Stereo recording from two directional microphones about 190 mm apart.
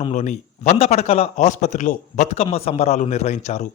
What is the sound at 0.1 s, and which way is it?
A man's voice, 40° left (ahead or behind).